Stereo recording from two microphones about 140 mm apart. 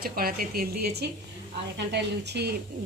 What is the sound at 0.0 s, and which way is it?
Speech, 90° right.